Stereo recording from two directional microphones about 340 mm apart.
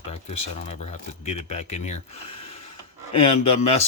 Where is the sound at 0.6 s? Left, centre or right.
Centre.